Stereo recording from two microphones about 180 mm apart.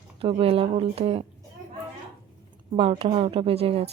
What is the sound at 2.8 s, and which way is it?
Speech, 30° right (ahead or behind).